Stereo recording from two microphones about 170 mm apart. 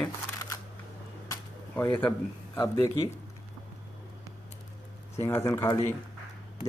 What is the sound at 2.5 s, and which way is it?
Speech, 20° left (ahead or behind).